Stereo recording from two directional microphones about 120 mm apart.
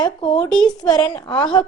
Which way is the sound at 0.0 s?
45° left (ahead or behind).